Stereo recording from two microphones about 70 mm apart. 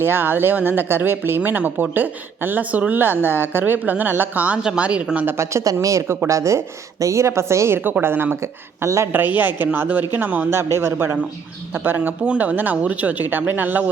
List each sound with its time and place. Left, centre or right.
0.0 s speech: right
5.2 s speech: right
7.8 s speech: right
9.1 s speech: right
10.5 s speech: right
11.9 s speech: centre